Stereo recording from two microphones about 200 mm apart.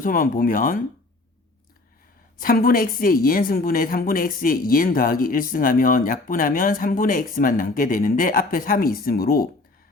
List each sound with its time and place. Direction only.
0.0 s a woman's voice: 45° left (ahead or behind)
2.4 s a woman's voice: 45° left (ahead or behind)